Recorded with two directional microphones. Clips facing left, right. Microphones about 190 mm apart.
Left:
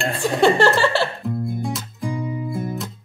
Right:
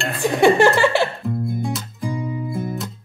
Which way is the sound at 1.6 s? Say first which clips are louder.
Right 1 dB; centre (ahead or behind).